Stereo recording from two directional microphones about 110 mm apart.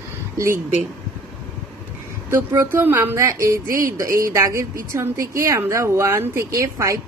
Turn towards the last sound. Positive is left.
turn(degrees=-30)  # may be behind; listen again after turning